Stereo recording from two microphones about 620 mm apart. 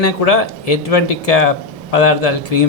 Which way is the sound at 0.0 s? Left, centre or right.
Left.